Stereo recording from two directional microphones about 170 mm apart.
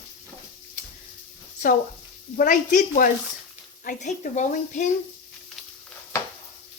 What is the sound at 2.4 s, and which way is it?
Speech, 50° left (ahead or behind).